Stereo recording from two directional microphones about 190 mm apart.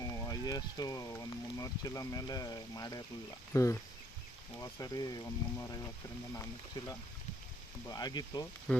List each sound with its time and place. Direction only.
0.0 s speech: 20° left (ahead or behind)
8.7 s frying: 5° left (ahead or behind)